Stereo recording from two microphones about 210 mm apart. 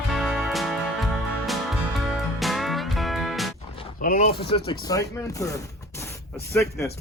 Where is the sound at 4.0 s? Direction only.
40° left (ahead or behind).